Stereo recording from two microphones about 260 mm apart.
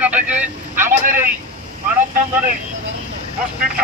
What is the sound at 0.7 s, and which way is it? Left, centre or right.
Vehicle, right.